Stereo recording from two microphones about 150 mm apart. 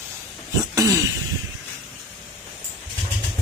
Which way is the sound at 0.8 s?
20° right (ahead or behind).